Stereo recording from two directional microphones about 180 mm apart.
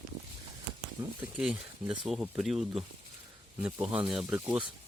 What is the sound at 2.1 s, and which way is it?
Speech, 5° right (ahead or behind).